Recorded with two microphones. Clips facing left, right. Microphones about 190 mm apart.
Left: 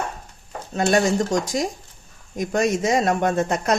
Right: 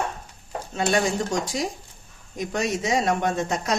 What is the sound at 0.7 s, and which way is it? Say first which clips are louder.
Speech: left 4 dB; 45° left (ahead or behind).